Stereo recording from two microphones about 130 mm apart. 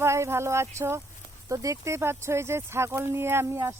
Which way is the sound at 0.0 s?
20° right (ahead or behind).